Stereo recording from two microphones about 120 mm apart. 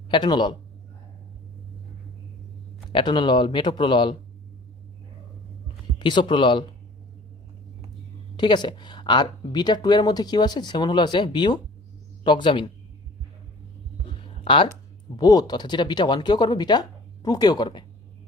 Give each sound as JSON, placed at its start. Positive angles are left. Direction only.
{"t": 0.1, "sound": "speech", "side_deg": 40}
{"t": 2.9, "sound": "speech", "side_deg": 40}
{"t": 6.0, "sound": "speech", "side_deg": 40}
{"t": 8.4, "sound": "speech", "side_deg": 40}
{"t": 14.1, "sound": "a sound", "side_deg": 45}
{"t": 15.1, "sound": "speech", "side_deg": 30}